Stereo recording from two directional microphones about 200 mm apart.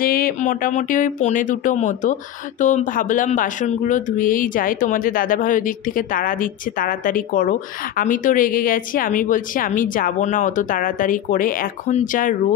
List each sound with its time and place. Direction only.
0.0 s speech: 45° left (ahead or behind)